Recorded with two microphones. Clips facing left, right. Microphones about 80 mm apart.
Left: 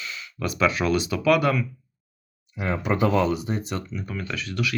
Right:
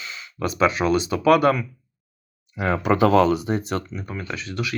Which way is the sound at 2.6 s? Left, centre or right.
Right.